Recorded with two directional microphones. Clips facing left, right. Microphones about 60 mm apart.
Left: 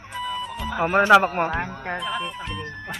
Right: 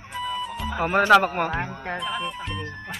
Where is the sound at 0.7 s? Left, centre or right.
Centre.